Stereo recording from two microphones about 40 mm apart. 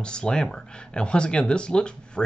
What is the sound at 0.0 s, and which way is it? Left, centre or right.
Speech, left.